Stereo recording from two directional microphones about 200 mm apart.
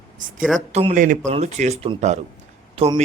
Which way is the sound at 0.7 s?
35° right (ahead or behind).